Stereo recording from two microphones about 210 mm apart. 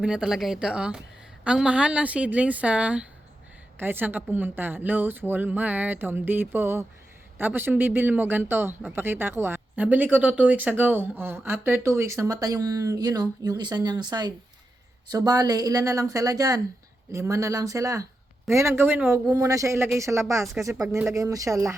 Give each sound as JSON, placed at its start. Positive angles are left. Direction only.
{"t": 0.0, "sound": "speech", "side_deg": -5}